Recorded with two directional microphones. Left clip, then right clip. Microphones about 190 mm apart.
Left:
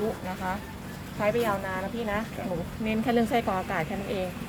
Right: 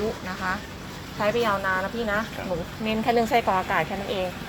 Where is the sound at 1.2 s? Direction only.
5° left (ahead or behind).